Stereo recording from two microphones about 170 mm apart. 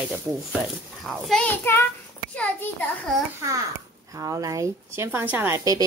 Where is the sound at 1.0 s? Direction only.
5° left (ahead or behind).